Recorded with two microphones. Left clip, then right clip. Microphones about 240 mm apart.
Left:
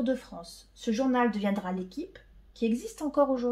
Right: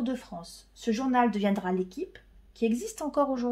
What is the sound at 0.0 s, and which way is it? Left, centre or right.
A woman's voice, right.